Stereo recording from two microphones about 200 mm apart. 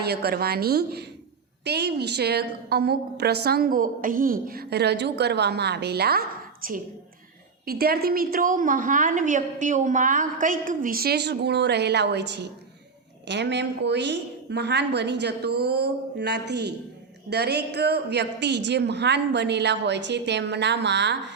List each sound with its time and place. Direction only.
0.0 s a woman's voice: 50° right (ahead or behind)